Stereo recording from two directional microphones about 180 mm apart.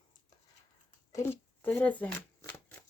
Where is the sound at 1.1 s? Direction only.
15° left (ahead or behind).